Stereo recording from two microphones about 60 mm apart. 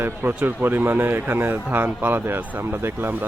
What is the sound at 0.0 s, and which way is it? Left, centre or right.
A man's voice, right.